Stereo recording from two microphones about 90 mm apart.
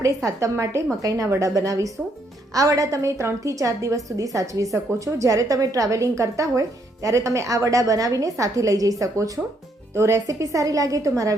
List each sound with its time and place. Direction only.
0.3 s a woman's voice: 35° right (ahead or behind)